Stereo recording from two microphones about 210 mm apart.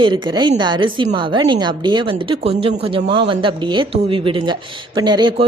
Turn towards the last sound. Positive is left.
turn(degrees=-20)  # may be behind; listen again after turning